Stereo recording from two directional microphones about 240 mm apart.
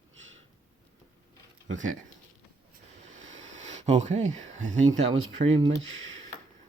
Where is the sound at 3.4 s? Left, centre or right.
Right.